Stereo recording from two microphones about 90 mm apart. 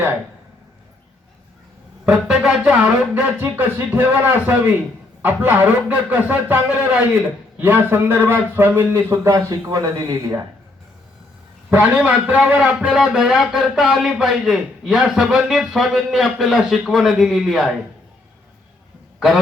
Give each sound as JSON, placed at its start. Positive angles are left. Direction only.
{"t": 2.0, "sound": "a man's voice", "side_deg": -10}
{"t": 11.8, "sound": "speech", "side_deg": -15}
{"t": 13.0, "sound": "a man's voice", "side_deg": -5}